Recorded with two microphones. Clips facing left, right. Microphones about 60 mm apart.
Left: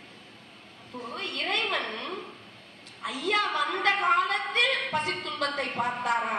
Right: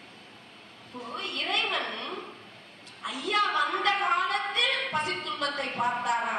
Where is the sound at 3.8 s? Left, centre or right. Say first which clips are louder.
Left 2 dB; left.